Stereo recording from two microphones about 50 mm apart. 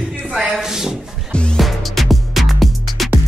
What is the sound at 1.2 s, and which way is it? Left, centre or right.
Music, centre.